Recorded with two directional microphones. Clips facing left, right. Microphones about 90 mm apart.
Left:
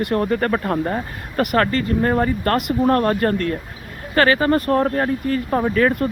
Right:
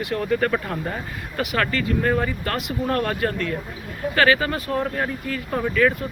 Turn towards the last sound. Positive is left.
turn(degrees=35)  # may be behind; listen again after turning